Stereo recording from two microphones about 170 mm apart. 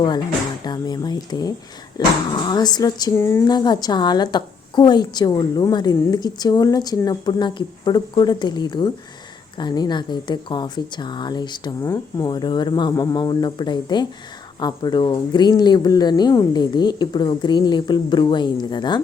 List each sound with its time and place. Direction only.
0.6 s a woman's voice: 25° left (ahead or behind)